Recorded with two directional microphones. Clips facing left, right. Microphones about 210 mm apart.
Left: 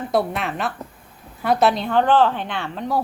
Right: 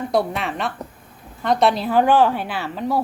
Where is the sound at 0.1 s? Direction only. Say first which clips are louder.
Left 1 dB; centre (ahead or behind).